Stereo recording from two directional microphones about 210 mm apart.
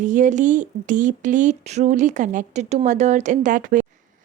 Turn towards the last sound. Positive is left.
turn(degrees=-40)  # may be behind; listen again after turning